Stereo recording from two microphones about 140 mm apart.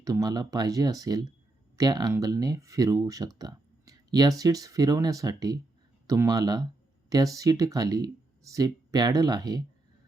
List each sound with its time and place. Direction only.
0.0 s speech: 25° right (ahead or behind)